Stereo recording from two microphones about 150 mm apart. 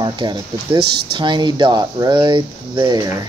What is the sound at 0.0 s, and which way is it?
Speech, 30° right (ahead or behind).